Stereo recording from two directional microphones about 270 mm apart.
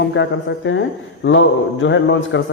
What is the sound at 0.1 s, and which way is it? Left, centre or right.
Speech, left.